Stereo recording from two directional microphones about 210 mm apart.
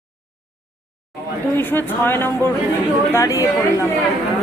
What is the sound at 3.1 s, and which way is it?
Speech, 15° left (ahead or behind).